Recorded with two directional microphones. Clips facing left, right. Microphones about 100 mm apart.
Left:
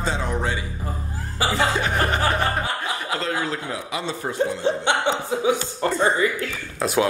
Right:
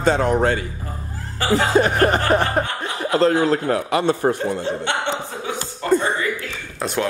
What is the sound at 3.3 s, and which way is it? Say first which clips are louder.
A man's voice: right 9 dB; 55° right (ahead or behind).